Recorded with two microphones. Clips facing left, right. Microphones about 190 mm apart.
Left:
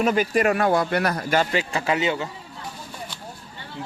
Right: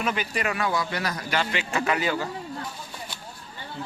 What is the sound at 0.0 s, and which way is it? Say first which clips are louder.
Speech: left 8 dB; 40° left (ahead or behind).